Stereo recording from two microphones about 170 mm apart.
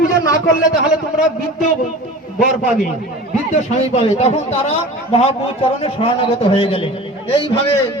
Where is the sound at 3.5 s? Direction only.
40° left (ahead or behind).